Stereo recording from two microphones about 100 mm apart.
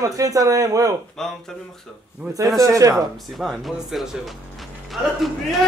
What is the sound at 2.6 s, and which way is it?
Speech, 30° right (ahead or behind).